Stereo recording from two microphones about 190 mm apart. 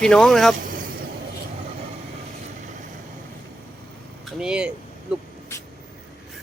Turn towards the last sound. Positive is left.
turn(degrees=15)  # may be behind; listen again after turning